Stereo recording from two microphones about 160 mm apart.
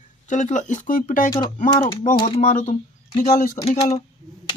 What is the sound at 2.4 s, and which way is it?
Speech, 50° left (ahead or behind).